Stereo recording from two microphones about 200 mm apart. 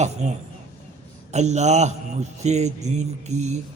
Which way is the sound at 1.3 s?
35° right (ahead or behind).